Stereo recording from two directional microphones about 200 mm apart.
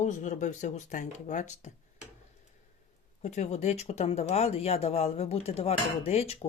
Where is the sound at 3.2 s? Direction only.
35° left (ahead or behind).